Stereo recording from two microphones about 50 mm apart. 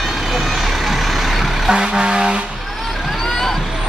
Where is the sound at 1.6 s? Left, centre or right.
Centre.